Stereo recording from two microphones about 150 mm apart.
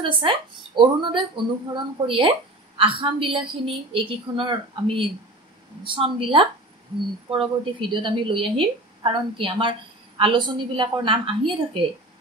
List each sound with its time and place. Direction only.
0.0 s a woman's voice: 35° right (ahead or behind)